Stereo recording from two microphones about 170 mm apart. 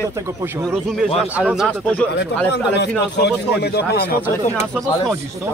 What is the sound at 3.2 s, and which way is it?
A man's voice, 75° left (ahead or behind).